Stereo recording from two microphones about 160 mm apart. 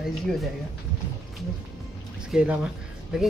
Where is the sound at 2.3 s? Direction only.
5° right (ahead or behind).